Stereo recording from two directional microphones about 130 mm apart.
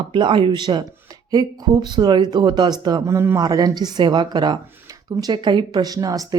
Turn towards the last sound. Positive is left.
turn(degrees=-30)  # may be behind; listen again after turning